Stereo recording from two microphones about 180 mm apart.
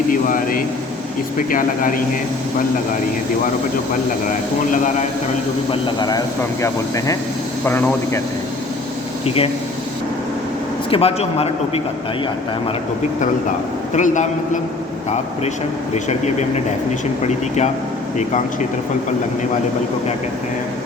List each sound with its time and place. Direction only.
0.1 s a man's voice: 50° left (ahead or behind)
5.7 s speech: 25° left (ahead or behind)
9.2 s a man's voice: 35° left (ahead or behind)
10.8 s a man's voice: 30° left (ahead or behind)
13.9 s a man's voice: 45° left (ahead or behind)
17.2 s a man's voice: 40° left (ahead or behind)